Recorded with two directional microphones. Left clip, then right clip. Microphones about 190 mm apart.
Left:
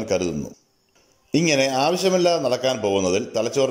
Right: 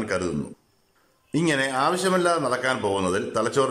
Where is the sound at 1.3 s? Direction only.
10° left (ahead or behind).